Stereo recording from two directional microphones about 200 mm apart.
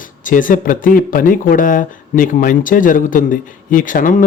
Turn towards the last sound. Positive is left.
turn(degrees=40)  # may be behind; listen again after turning